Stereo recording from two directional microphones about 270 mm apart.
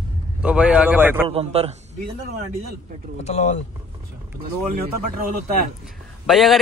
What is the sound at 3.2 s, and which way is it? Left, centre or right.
Speech, left.